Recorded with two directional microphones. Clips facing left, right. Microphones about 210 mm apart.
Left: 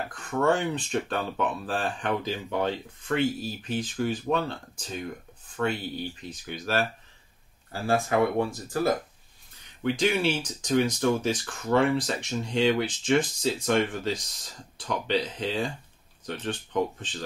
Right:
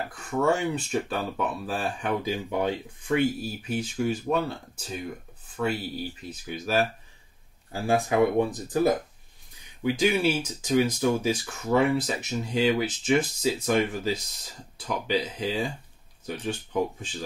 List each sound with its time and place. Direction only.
0.1 s speech: 10° right (ahead or behind)